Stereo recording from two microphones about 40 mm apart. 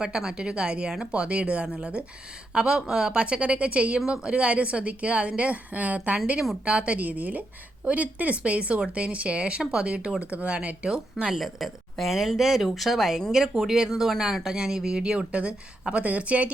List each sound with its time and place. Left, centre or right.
0.0 s speech: centre
2.5 s a woman's voice: centre
7.0 s a woman's voice: right
10.8 s speech: right
11.3 s speech: centre; by 15.4 s right
15.9 s a woman's voice: right